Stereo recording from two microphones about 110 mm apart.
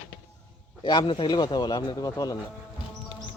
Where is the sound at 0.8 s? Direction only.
45° left (ahead or behind).